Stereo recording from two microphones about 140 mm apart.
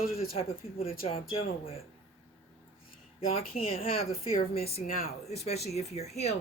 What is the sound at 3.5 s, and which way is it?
Speech, 45° left (ahead or behind).